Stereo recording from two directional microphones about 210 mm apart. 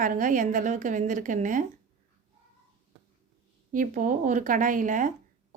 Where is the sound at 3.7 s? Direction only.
40° right (ahead or behind).